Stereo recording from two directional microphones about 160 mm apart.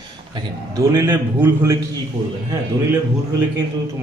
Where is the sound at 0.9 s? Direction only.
15° right (ahead or behind).